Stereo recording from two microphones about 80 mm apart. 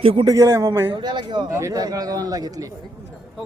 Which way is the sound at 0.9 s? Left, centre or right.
Right.